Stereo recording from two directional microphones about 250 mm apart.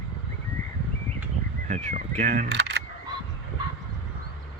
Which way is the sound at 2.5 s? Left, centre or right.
Right.